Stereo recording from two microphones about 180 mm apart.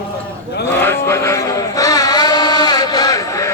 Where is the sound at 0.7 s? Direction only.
10° left (ahead or behind).